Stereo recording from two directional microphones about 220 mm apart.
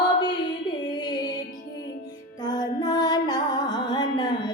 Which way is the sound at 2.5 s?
20° left (ahead or behind).